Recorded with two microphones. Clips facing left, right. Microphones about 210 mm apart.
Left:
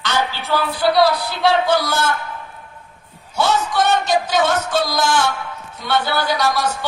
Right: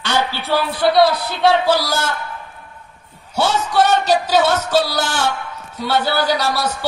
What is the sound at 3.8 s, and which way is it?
A man's voice, 35° right (ahead or behind).